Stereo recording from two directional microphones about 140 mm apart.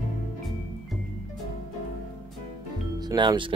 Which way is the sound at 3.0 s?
30° right (ahead or behind).